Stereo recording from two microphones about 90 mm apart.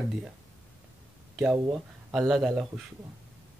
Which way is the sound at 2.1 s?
5° right (ahead or behind).